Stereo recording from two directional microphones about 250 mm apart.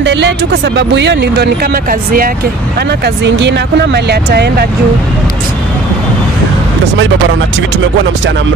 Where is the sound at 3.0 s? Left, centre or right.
Right.